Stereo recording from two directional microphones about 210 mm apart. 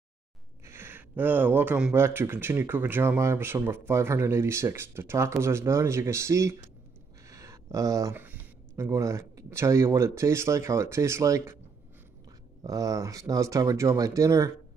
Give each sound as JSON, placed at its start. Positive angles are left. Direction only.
{"t": 0.7, "sound": "speech", "side_deg": -10}
{"t": 12.6, "sound": "speech", "side_deg": -15}